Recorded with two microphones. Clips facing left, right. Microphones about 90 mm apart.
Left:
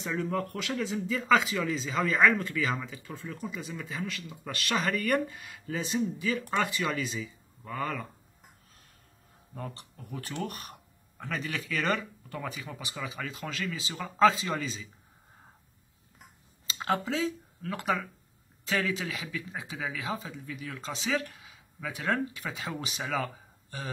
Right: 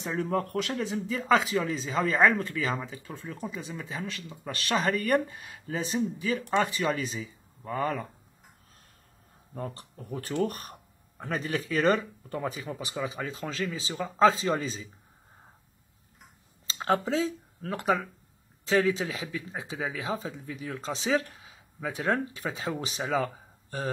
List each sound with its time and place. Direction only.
0.0 s speech: 40° right (ahead or behind)
9.6 s speech: 35° right (ahead or behind)
16.6 s speech: 35° right (ahead or behind)